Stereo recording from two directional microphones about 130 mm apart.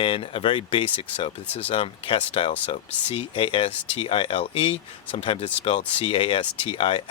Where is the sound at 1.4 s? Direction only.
15° left (ahead or behind).